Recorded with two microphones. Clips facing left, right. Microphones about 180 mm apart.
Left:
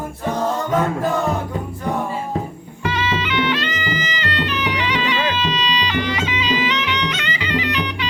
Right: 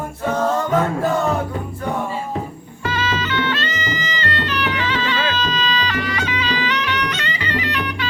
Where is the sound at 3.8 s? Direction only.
40° right (ahead or behind).